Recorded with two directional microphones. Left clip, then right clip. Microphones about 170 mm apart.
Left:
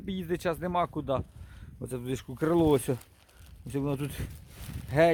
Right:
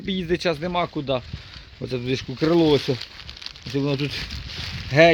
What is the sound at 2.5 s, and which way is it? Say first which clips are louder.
Speech: right 6 dB; 35° left (ahead or behind).